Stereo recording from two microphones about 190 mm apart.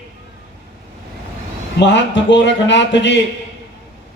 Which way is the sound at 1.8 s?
70° left (ahead or behind).